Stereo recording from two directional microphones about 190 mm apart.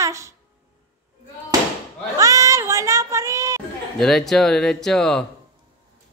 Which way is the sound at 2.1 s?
15° right (ahead or behind).